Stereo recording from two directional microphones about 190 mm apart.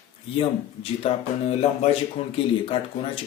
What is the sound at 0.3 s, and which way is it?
Speech, 30° left (ahead or behind).